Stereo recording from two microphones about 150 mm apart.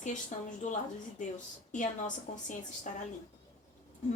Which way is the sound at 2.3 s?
60° left (ahead or behind).